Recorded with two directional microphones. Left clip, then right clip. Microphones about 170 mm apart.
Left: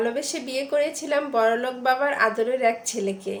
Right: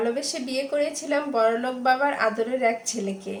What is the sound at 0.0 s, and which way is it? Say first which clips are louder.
A woman's voice: even; 20° left (ahead or behind).